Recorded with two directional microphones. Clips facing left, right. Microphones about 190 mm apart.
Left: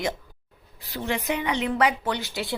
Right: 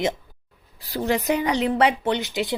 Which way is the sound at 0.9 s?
40° right (ahead or behind).